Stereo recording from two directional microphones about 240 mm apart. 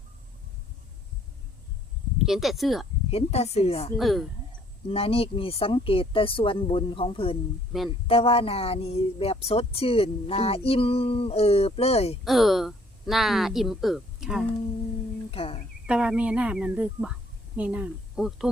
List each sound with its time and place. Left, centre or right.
2.2 s speech: centre
3.1 s speech: left
3.9 s speech: centre
4.9 s speech: left
12.2 s speech: centre
15.3 s a sound: left
15.9 s speech: centre